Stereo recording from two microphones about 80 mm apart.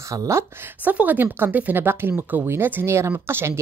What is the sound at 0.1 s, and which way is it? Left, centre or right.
Speech, right.